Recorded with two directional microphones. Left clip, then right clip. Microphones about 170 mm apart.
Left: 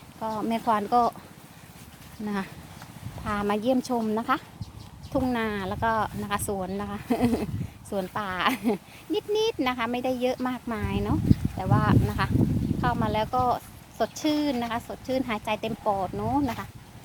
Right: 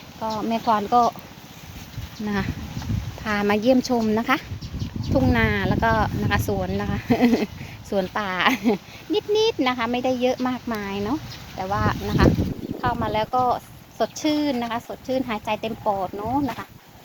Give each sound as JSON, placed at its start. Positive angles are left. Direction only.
{"t": 0.2, "sound": "speech", "side_deg": 30}
{"t": 2.2, "sound": "speech", "side_deg": 10}
{"t": 3.2, "sound": "speech", "side_deg": 0}
{"t": 14.8, "sound": "speech", "side_deg": 20}